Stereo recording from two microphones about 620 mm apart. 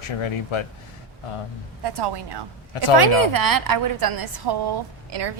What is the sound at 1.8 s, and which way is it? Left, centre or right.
A woman's voice, right.